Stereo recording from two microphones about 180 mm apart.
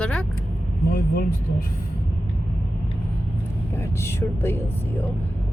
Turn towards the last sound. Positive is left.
turn(degrees=15)  # may be behind; listen again after turning